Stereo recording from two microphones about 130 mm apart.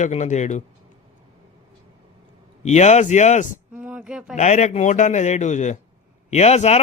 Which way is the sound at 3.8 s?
10° right (ahead or behind).